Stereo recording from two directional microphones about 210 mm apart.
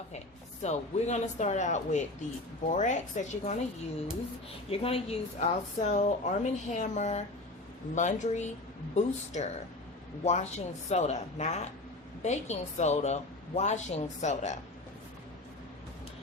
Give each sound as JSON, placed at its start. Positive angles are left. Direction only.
{"t": 0.6, "sound": "a woman's voice", "side_deg": 35}
{"t": 4.7, "sound": "a woman's voice", "side_deg": 25}